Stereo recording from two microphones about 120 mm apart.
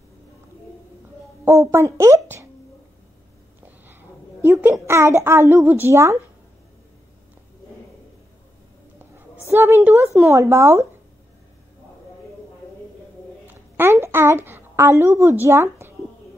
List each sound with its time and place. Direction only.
1.4 s a woman's voice: 20° right (ahead or behind)
3.6 s a sound: 15° right (ahead or behind)
4.8 s a woman's voice: 20° right (ahead or behind)
9.5 s a woman's voice: 20° right (ahead or behind)
13.7 s a child's voice: 20° right (ahead or behind)